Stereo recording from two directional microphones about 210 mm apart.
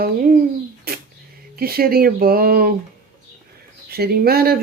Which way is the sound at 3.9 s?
45° right (ahead or behind).